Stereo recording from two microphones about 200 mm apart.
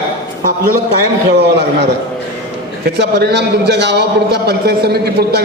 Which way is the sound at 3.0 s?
55° right (ahead or behind).